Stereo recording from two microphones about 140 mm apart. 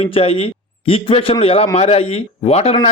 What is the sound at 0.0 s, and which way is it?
A man's voice, 45° left (ahead or behind).